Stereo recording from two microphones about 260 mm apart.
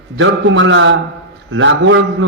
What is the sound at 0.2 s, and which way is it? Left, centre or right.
Mantra, right.